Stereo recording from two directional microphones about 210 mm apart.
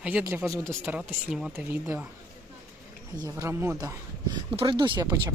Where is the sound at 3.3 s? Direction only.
10° right (ahead or behind).